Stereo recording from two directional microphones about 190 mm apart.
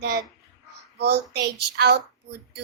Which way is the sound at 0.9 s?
60° right (ahead or behind).